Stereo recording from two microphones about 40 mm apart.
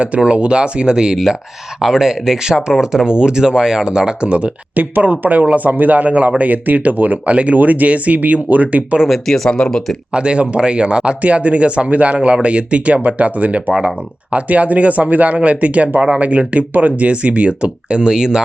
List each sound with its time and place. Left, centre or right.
0.0 s speech: right
9.2 s speech: centre
10.1 s speech: right